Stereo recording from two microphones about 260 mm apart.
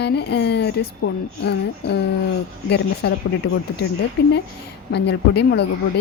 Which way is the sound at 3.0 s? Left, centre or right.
Left.